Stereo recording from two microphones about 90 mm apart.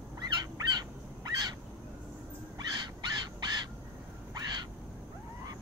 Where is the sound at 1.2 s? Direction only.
45° right (ahead or behind).